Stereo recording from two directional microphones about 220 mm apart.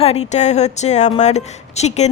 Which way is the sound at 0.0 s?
30° left (ahead or behind).